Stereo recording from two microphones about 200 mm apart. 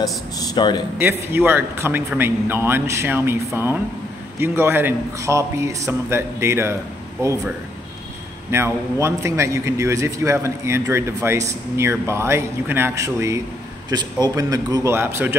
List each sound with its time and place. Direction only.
0.4 s speech: 20° left (ahead or behind)
0.9 s a man's voice: 10° right (ahead or behind)
4.4 s a man's voice: 10° right (ahead or behind)